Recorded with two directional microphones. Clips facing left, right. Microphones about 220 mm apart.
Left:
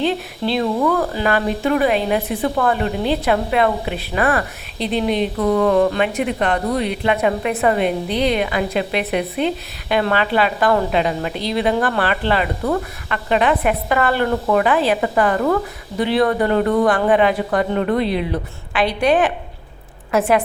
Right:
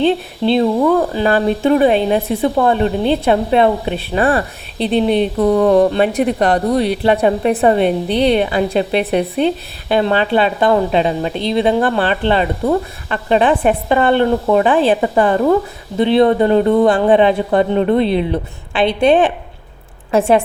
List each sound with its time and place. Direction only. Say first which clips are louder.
0.0 s a woman's voice: right 5 dB; 25° right (ahead or behind)